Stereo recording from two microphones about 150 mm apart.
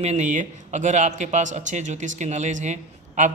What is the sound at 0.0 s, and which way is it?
A man's voice, 50° right (ahead or behind).